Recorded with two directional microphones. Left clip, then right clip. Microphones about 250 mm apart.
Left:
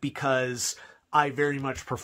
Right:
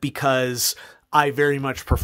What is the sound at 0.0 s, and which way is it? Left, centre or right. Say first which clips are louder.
Speech: right 6 dB; right.